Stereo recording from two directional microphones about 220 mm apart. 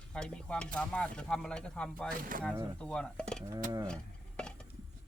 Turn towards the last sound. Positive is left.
turn(degrees=5)  # may be behind; listen again after turning